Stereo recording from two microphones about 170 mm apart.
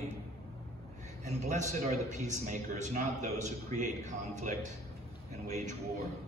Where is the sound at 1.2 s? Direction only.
45° right (ahead or behind).